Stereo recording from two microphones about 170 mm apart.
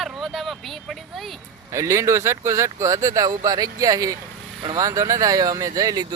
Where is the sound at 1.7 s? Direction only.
20° right (ahead or behind).